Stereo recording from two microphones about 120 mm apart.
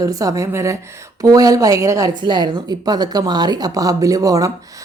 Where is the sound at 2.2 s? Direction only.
40° right (ahead or behind).